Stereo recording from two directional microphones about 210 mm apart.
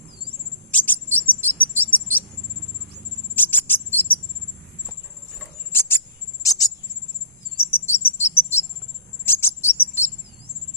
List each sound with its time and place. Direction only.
0.7 s bird vocalization: 10° left (ahead or behind)
1.2 s cricket: 10° left (ahead or behind)
3.3 s music: 10° left (ahead or behind)
6.4 s cricket: 15° left (ahead or behind)